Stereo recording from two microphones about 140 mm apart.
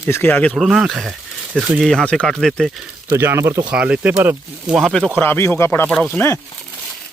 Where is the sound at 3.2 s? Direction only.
15° right (ahead or behind).